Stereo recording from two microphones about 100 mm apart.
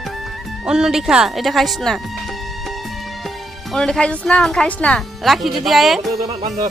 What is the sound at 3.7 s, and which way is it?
Speech, 5° left (ahead or behind).